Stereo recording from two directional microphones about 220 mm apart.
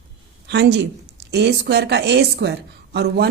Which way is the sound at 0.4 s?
50° right (ahead or behind).